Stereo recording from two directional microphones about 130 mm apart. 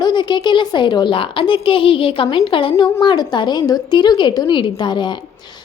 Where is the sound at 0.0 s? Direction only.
35° left (ahead or behind).